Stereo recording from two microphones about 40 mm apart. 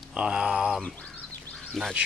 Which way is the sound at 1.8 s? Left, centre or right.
Centre.